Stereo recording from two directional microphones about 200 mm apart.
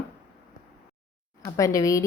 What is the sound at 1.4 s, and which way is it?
Speech, 15° left (ahead or behind).